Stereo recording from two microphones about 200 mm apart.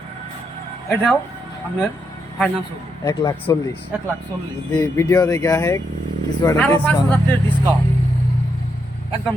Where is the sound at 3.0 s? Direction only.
15° left (ahead or behind).